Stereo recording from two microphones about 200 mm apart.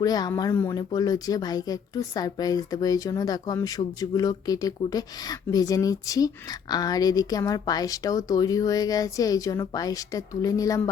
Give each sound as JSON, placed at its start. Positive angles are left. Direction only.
{"t": 0.0, "sound": "speech", "side_deg": 20}